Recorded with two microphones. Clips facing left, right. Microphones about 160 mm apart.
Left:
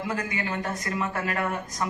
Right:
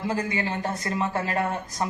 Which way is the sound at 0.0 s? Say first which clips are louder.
Right 3 dB; 30° right (ahead or behind).